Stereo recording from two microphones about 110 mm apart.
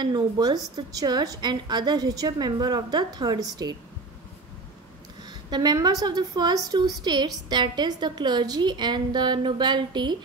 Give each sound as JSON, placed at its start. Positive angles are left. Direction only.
{"t": 0.0, "sound": "a woman's voice", "side_deg": -40}
{"t": 5.5, "sound": "a woman's voice", "side_deg": -40}